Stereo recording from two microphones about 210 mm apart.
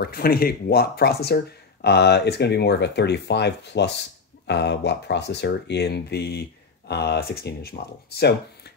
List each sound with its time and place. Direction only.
0.0 s speech: 45° left (ahead or behind)